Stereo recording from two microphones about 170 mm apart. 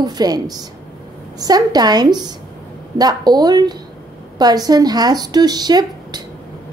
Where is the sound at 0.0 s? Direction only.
25° right (ahead or behind).